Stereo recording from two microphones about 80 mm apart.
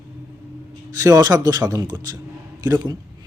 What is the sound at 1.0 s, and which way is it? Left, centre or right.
Speech, right.